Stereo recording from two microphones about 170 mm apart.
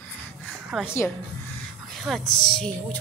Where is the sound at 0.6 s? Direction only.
5° right (ahead or behind).